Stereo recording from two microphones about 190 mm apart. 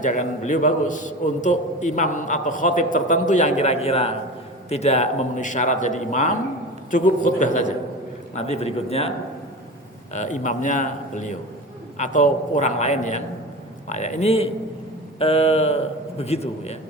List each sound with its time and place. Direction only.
0.0 s a man's voice: 40° left (ahead or behind)